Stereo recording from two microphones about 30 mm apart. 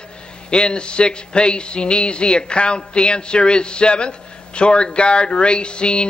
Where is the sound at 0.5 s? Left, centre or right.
Left.